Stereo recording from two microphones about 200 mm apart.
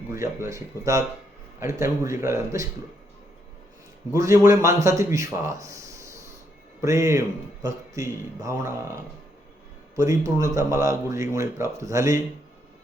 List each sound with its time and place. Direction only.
0.1 s speech: 15° right (ahead or behind)
4.1 s speech: 15° right (ahead or behind)
9.9 s speech: 15° right (ahead or behind)